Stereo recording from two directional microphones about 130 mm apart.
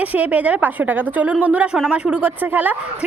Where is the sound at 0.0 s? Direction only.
10° right (ahead or behind).